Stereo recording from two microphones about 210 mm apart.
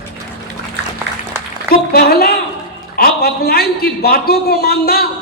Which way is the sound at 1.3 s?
10° right (ahead or behind).